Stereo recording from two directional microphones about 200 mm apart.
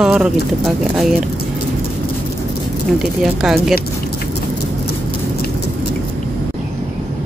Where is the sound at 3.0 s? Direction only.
Centre (ahead or behind).